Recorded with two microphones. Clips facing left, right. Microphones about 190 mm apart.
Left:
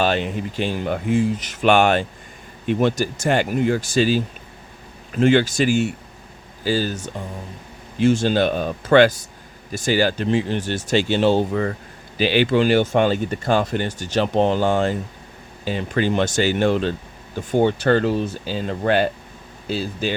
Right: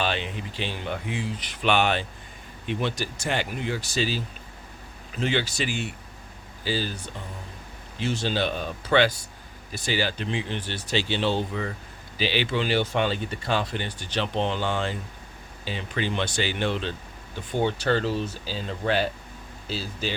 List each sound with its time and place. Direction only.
0.0 s speech: 45° left (ahead or behind)